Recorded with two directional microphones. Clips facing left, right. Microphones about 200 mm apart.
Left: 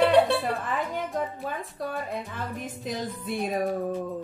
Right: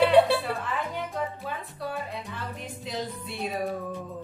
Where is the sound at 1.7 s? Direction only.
50° left (ahead or behind).